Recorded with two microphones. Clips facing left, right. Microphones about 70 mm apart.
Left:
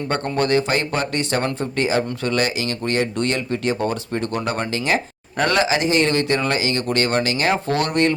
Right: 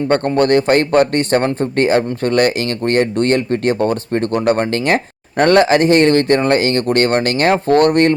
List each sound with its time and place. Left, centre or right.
0.1 s speech: right